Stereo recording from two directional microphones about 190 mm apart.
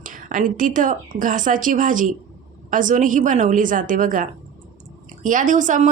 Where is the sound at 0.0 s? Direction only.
45° right (ahead or behind).